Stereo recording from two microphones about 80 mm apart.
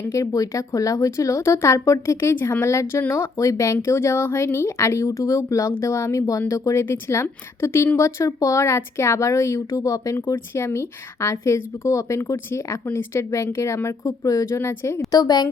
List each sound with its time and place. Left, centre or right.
0.1 s speech: left
10.3 s speech: left
15.1 s a woman's voice: left